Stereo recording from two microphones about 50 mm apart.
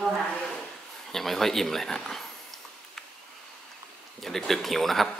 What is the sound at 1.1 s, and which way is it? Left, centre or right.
Speech, centre.